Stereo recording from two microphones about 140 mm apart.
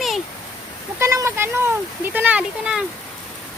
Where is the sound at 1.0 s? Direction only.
20° right (ahead or behind).